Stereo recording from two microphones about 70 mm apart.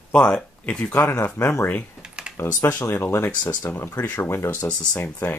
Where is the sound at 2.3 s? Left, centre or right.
Left.